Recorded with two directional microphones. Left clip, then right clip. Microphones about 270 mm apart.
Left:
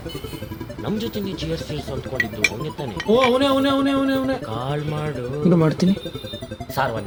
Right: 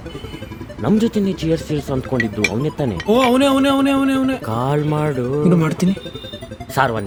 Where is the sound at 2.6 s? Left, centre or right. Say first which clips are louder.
Right 6 dB; right.